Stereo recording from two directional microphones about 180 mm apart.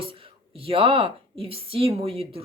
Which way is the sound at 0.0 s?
30° right (ahead or behind).